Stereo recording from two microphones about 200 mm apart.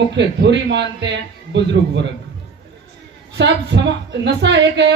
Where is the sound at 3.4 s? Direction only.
60° right (ahead or behind).